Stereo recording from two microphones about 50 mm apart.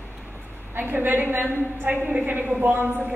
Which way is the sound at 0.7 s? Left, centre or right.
Right.